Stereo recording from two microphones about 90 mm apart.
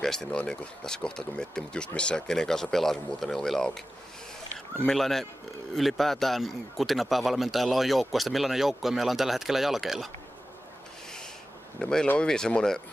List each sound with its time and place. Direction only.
0.0 s speech: 5° left (ahead or behind)
4.8 s speech: centre (ahead or behind)
11.8 s speech: 5° left (ahead or behind)